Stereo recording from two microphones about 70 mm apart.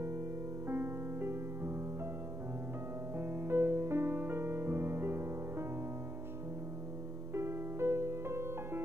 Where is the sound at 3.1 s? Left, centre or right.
Right.